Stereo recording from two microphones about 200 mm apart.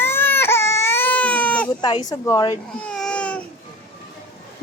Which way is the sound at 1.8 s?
20° left (ahead or behind).